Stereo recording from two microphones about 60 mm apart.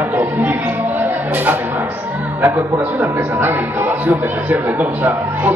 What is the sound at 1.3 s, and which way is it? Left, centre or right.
Speech, right.